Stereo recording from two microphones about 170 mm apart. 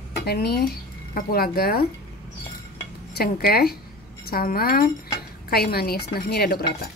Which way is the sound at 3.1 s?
65° left (ahead or behind).